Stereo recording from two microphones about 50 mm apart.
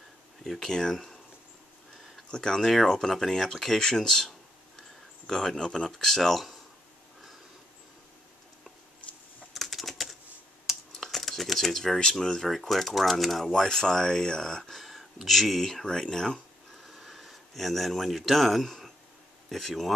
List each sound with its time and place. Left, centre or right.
0.4 s speech: centre
2.3 s speech: centre
9.5 s typing: centre
11.0 s a sound: centre
12.4 s speech: centre
16.8 s a sound: centre
19.5 s speech: centre